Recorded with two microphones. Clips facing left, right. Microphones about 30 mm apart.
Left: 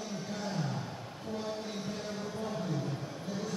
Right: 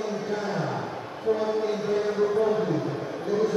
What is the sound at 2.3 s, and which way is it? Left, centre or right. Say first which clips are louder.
Music: right 14 dB; right.